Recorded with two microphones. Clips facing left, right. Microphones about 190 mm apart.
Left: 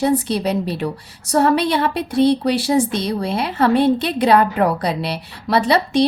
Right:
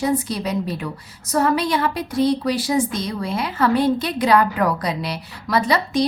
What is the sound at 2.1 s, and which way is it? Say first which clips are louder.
Speech: left 4 dB; 65° left (ahead or behind).